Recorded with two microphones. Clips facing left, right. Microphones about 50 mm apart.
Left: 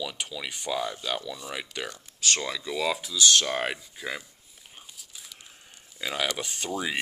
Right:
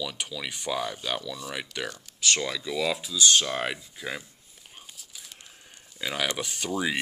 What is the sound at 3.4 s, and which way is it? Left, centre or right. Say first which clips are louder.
Speech: left 1 dB; left.